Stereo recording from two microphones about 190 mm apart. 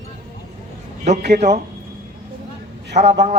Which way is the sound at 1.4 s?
35° right (ahead or behind).